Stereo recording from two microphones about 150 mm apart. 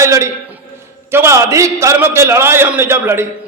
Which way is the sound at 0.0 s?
20° right (ahead or behind).